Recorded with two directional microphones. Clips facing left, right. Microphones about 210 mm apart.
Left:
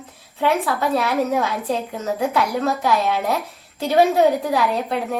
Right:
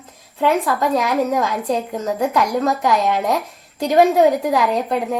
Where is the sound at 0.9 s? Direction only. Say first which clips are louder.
Right 1 dB; 15° right (ahead or behind).